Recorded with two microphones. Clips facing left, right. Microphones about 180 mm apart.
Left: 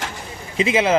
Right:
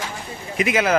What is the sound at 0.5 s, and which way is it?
Speech, 25° left (ahead or behind).